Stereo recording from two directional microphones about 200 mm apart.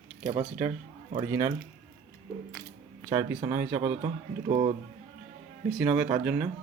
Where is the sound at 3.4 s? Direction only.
10° right (ahead or behind).